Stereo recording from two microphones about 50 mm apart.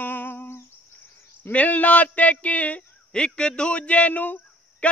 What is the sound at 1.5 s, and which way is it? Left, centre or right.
A man's voice, left.